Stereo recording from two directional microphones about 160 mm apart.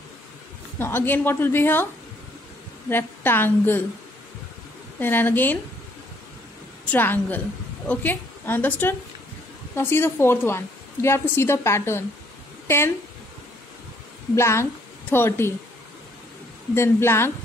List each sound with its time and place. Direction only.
0.7 s a woman's voice: 15° left (ahead or behind)
2.9 s a woman's voice: 15° left (ahead or behind)
5.0 s a woman's voice: 10° left (ahead or behind)
6.9 s a woman's voice: 10° left (ahead or behind)
14.3 s a woman's voice: 15° left (ahead or behind)
16.7 s a woman's voice: 15° left (ahead or behind)